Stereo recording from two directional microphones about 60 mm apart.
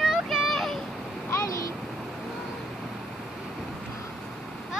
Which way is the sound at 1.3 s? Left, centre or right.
Left.